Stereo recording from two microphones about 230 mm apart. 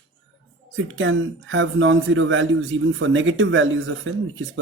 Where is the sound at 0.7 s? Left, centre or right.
Right.